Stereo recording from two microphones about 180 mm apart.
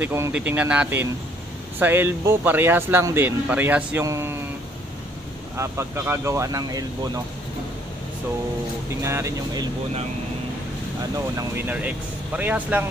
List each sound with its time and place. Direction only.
0.0 s speech: 10° right (ahead or behind)
5.6 s speech: 15° right (ahead or behind)
9.0 s speech: 15° right (ahead or behind)
11.3 s speech: 10° right (ahead or behind)